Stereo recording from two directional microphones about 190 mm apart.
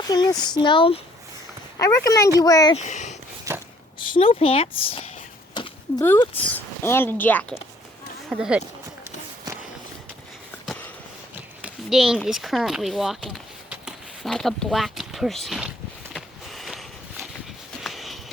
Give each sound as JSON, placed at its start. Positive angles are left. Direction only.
{"t": 0.1, "sound": "speech", "side_deg": 20}
{"t": 1.8, "sound": "speech", "side_deg": 15}
{"t": 2.7, "sound": "speech", "side_deg": 40}
{"t": 3.9, "sound": "speech", "side_deg": 25}
{"t": 5.5, "sound": "a sound", "side_deg": 25}
{"t": 6.5, "sound": "speech", "side_deg": 10}
{"t": 8.3, "sound": "speech", "side_deg": -5}
{"t": 11.6, "sound": "speech", "side_deg": 0}
{"t": 16.1, "sound": "a sound", "side_deg": 0}
{"t": 17.8, "sound": "a sound", "side_deg": 0}